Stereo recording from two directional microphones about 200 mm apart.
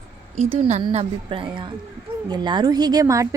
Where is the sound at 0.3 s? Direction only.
30° right (ahead or behind).